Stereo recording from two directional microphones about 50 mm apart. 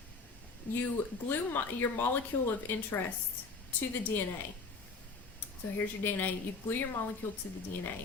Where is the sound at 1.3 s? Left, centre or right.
Left.